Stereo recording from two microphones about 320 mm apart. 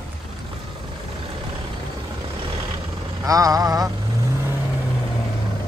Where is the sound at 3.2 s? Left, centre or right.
Centre.